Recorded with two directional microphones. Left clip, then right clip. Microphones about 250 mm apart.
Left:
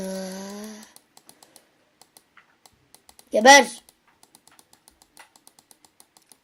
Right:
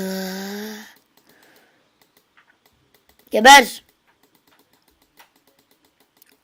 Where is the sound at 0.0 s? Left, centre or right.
Right.